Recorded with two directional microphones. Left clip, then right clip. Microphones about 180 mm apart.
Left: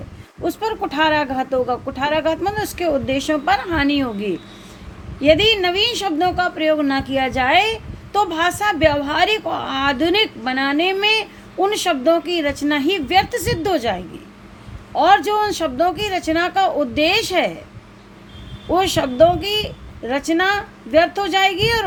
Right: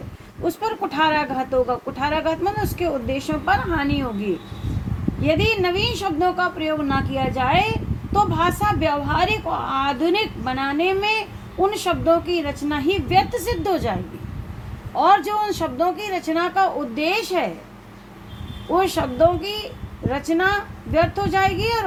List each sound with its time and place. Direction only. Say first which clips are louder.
0.4 s speech: left 2 dB; 45° left (ahead or behind)
5.2 s a woman's voice: left 6 dB; 40° left (ahead or behind)
14.9 s a woman's voice: left 3 dB; 35° left (ahead or behind)
18.7 s a woman's voice: left 2 dB; 40° left (ahead or behind)